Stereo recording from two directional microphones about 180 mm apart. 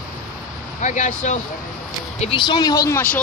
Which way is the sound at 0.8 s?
40° left (ahead or behind).